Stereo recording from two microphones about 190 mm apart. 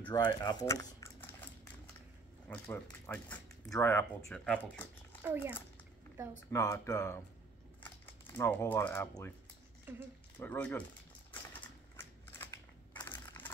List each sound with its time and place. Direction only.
0.1 s speech: 25° left (ahead or behind)
2.4 s speech: 10° left (ahead or behind)
5.3 s a child's voice: 10° right (ahead or behind)
6.5 s speech: 15° left (ahead or behind)
9.9 s a child's voice: 10° right (ahead or behind)
10.4 s speech: 10° left (ahead or behind)
12.0 s a sound: 10° left (ahead or behind)
12.9 s crumpling: 20° left (ahead or behind)